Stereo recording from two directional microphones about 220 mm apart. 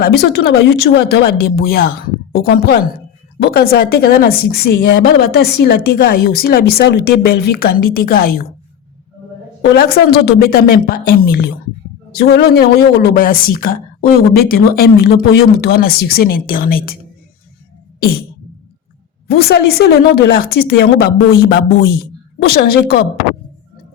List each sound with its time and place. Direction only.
0.0 s a woman's voice: 45° left (ahead or behind)
9.6 s a woman's voice: 50° left (ahead or behind)
19.3 s a woman's voice: 45° left (ahead or behind)